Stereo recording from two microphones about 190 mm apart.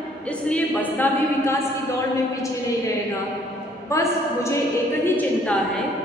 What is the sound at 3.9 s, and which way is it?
A woman's voice, 15° left (ahead or behind).